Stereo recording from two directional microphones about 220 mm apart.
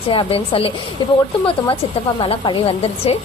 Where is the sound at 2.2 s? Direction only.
25° left (ahead or behind).